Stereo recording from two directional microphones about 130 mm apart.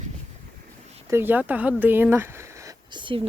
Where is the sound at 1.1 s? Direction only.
15° right (ahead or behind).